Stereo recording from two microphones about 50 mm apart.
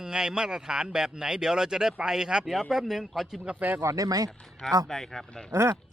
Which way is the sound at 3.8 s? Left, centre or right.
Right.